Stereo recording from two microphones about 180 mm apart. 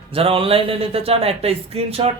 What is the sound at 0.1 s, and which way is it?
Speech, 30° right (ahead or behind).